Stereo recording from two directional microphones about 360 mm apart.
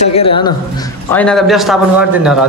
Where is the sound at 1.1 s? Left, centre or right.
Centre.